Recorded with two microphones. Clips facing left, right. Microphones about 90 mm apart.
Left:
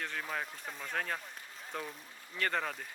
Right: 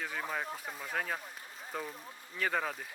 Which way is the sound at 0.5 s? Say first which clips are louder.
Right 1 dB; 5° right (ahead or behind).